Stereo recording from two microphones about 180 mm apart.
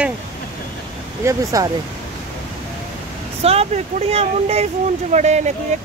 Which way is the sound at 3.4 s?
35° right (ahead or behind).